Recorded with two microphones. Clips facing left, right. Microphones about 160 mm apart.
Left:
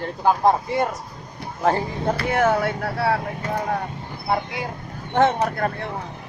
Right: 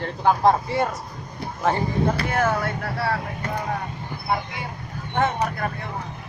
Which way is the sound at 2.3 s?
65° left (ahead or behind).